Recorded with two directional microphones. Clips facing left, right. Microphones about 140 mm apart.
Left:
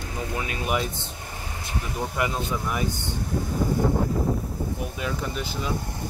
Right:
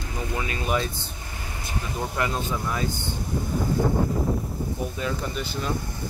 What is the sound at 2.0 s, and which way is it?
Speech, 10° left (ahead or behind).